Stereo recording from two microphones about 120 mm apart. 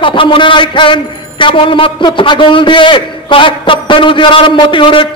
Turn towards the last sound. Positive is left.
turn(degrees=45)  # may be behind; listen again after turning